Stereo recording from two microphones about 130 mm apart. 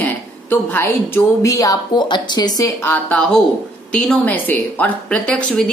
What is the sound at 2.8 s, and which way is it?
Speech, 15° left (ahead or behind).